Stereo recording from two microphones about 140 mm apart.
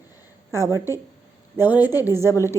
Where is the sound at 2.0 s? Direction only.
20° right (ahead or behind).